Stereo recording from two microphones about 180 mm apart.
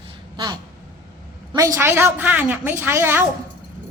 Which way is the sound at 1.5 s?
20° right (ahead or behind).